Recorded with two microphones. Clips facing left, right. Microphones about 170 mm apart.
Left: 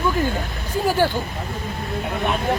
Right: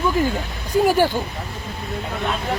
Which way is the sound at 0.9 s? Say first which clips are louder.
Even; 15° right (ahead or behind).